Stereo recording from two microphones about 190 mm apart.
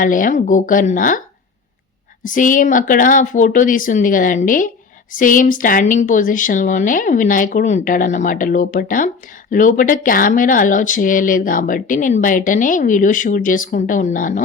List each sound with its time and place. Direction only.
0.0 s speech: 45° left (ahead or behind)
2.2 s speech: 45° left (ahead or behind)